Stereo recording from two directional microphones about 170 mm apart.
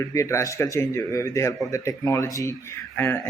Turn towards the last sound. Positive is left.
turn(degrees=15)  # may be behind; listen again after turning